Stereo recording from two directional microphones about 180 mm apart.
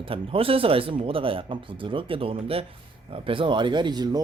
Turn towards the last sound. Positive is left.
turn(degrees=-25)  # may be behind; listen again after turning